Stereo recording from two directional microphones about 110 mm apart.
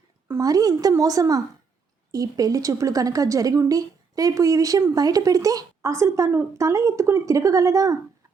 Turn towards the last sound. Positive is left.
turn(degrees=-30)  # may be behind; listen again after turning